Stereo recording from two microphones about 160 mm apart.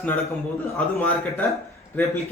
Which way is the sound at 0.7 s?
10° left (ahead or behind).